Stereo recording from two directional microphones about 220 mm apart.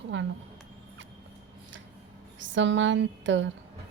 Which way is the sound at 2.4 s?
55° right (ahead or behind).